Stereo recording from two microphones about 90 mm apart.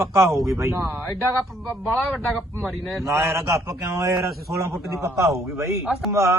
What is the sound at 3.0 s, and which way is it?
A man's voice, 30° right (ahead or behind).